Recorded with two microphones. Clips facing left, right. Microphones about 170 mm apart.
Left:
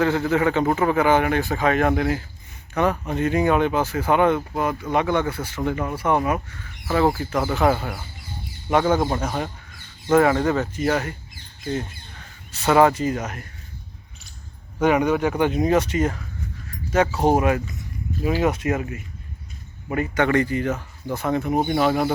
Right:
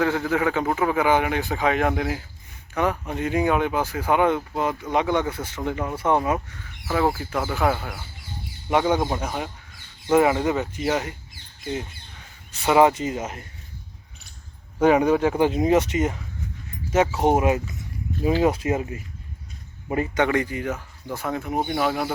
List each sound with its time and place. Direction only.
0.3 s speech: 10° right (ahead or behind)
6.8 s speech: 5° right (ahead or behind)
8.7 s speech: 15° right (ahead or behind)
12.5 s speech: 15° right (ahead or behind)
14.8 s speech: 30° right (ahead or behind)
20.2 s speech: 15° right (ahead or behind)